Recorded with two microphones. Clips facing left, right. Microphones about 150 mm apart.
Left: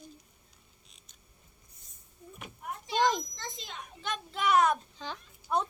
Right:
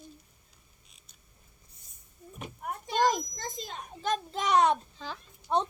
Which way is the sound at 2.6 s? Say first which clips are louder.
Right 1 dB; 45° right (ahead or behind).